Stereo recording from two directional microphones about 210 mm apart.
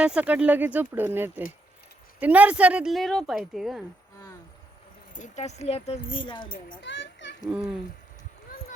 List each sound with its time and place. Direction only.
0.0 s speech: 5° right (ahead or behind)
5.1 s speech: 35° left (ahead or behind)
6.5 s a child's voice: 45° left (ahead or behind)
6.9 s children playing: 60° left (ahead or behind)